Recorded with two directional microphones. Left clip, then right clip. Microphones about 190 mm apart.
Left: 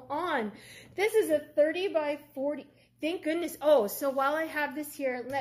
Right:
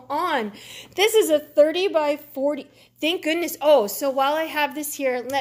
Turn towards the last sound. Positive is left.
turn(degrees=-35)  # may be behind; listen again after turning